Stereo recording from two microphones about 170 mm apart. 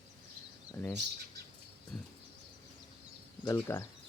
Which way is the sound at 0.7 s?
15° left (ahead or behind).